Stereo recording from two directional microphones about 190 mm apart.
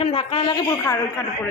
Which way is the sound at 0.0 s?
30° left (ahead or behind).